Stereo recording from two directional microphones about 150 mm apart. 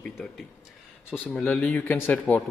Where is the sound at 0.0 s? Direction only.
5° left (ahead or behind).